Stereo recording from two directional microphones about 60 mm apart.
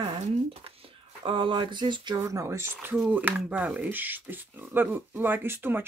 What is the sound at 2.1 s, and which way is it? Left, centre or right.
Speech, right.